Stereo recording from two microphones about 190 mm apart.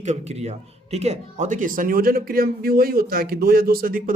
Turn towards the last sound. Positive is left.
turn(degrees=-50)  # may be behind; listen again after turning